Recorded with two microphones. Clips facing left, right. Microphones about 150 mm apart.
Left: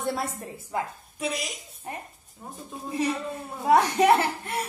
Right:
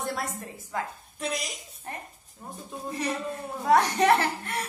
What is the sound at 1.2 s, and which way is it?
A woman's voice, 5° left (ahead or behind).